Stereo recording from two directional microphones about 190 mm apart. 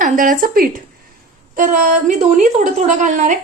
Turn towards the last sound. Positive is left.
turn(degrees=-40)  # may be behind; listen again after turning